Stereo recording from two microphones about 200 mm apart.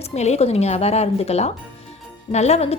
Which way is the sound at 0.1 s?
35° left (ahead or behind).